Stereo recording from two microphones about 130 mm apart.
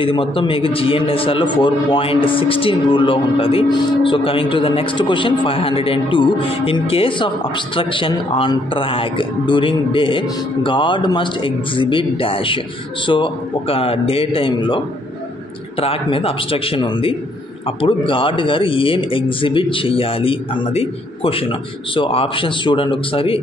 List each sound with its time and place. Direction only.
0.0 s a man's voice: 40° left (ahead or behind)
15.8 s a man's voice: 45° left (ahead or behind)